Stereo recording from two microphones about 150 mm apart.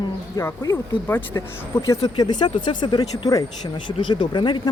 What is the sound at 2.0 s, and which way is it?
Speech, 30° left (ahead or behind).